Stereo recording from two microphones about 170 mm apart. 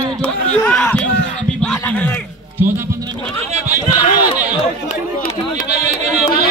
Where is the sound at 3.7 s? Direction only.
25° left (ahead or behind).